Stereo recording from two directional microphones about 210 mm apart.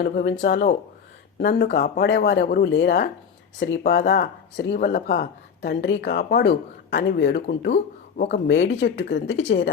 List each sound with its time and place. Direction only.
0.0 s speech: 45° left (ahead or behind)